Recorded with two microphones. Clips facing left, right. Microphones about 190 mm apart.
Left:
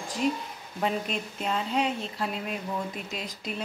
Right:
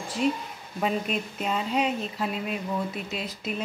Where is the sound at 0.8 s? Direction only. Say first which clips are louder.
Right 2 dB; 5° right (ahead or behind).